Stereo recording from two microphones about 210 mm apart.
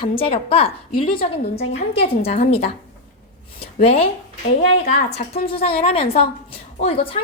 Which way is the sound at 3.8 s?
30° left (ahead or behind).